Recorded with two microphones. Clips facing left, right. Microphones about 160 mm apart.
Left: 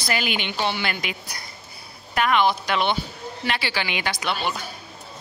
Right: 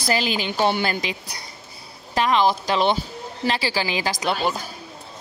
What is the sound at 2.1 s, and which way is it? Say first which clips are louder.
A woman's voice: right 1 dB; 30° right (ahead or behind).